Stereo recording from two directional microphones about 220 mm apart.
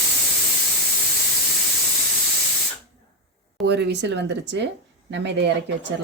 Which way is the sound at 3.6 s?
50° right (ahead or behind).